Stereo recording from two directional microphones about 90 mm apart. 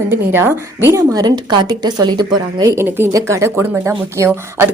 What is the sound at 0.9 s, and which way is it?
A woman's voice, 35° right (ahead or behind).